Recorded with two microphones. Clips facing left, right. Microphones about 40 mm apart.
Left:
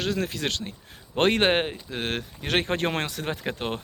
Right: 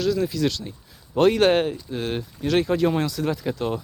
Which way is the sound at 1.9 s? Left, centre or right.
Left.